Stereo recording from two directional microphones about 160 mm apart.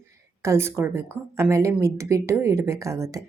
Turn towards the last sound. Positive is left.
turn(degrees=-20)  # may be behind; listen again after turning